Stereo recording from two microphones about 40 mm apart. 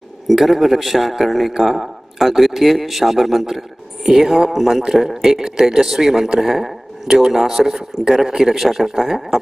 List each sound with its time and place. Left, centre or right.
0.3 s a man's voice: centre